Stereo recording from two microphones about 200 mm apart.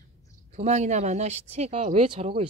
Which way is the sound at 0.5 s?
35° right (ahead or behind).